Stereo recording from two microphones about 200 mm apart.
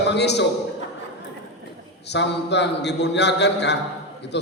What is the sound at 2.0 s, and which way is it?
A man's voice, 60° left (ahead or behind).